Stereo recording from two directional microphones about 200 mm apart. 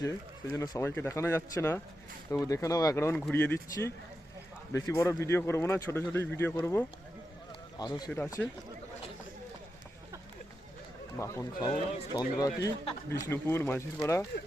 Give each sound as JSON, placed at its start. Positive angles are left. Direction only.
{"t": 0.5, "sound": "a man's voice", "side_deg": 15}
{"t": 8.1, "sound": "speech", "side_deg": 10}
{"t": 11.2, "sound": "a man's voice", "side_deg": 15}